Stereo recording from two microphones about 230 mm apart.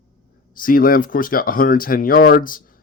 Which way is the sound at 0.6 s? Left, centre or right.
Left.